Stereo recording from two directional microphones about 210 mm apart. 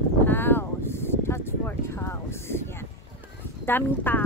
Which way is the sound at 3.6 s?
10° left (ahead or behind).